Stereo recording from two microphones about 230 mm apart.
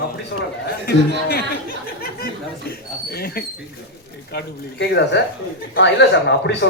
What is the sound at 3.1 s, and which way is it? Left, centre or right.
Speech, left.